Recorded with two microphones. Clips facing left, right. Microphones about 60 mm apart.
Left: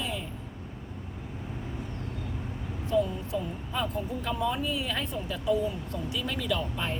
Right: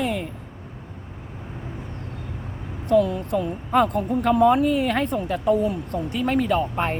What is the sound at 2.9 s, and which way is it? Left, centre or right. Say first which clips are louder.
Speech: right 8 dB; right.